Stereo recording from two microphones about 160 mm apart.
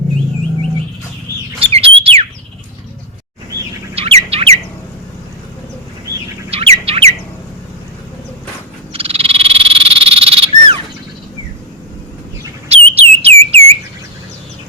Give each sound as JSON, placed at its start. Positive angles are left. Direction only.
{"t": 1.5, "sound": "bird", "side_deg": -35}
{"t": 3.9, "sound": "bird", "side_deg": -40}
{"t": 6.5, "sound": "bird", "side_deg": -40}
{"t": 8.9, "sound": "frog", "side_deg": -35}
{"t": 12.6, "sound": "bird", "side_deg": -40}